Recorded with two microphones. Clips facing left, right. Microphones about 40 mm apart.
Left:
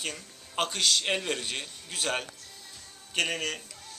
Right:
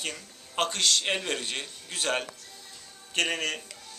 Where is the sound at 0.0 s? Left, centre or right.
Centre.